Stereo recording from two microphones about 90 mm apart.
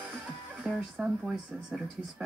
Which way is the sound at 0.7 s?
10° right (ahead or behind).